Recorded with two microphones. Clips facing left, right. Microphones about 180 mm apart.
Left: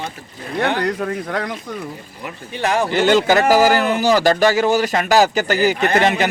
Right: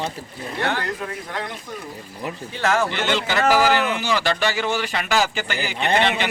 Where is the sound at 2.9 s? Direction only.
40° left (ahead or behind).